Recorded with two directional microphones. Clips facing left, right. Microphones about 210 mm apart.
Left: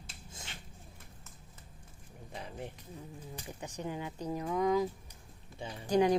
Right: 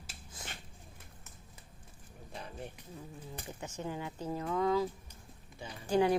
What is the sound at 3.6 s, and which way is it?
Speech, 15° left (ahead or behind).